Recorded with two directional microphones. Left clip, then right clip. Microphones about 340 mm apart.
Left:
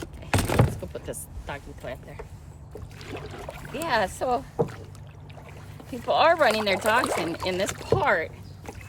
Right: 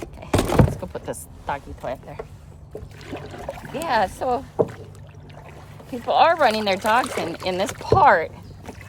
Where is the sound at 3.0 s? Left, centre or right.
Right.